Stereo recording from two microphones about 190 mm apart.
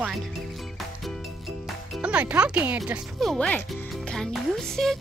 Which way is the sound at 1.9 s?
5° right (ahead or behind).